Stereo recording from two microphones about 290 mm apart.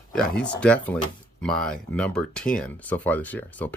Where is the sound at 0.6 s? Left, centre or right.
Centre.